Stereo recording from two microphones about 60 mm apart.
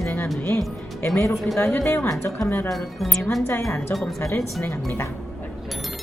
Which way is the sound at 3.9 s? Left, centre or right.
Left.